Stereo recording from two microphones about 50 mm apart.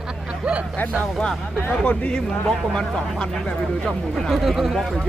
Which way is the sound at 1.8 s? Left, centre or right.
Left.